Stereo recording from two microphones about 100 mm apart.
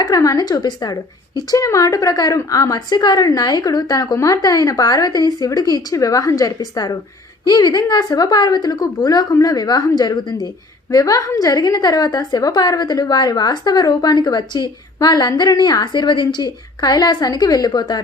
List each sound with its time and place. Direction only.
0.0 s a woman's voice: 35° left (ahead or behind)
1.5 s a woman's voice: 35° left (ahead or behind)